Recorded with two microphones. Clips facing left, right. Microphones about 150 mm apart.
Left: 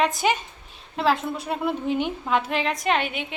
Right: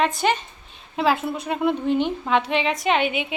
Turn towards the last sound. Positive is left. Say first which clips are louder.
# right 3 dB
turn(degrees=-5)  # may be behind; listen again after turning